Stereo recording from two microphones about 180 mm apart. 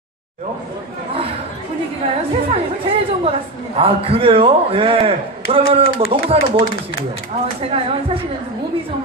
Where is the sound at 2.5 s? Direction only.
35° right (ahead or behind).